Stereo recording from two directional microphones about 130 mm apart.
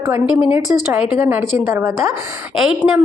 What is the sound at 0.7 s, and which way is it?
Speech, 15° right (ahead or behind).